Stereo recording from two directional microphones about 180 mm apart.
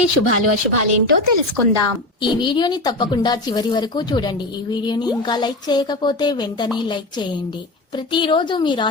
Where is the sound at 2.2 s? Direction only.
25° left (ahead or behind).